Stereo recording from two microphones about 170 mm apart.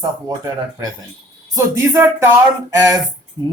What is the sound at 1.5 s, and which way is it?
Speech, 15° right (ahead or behind).